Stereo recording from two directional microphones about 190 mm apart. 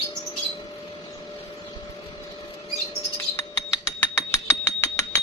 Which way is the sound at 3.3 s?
15° left (ahead or behind).